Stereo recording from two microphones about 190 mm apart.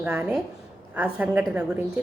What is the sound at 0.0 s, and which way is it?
A woman's voice, 10° right (ahead or behind).